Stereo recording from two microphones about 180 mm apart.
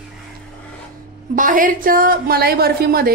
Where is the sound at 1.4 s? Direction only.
50° right (ahead or behind).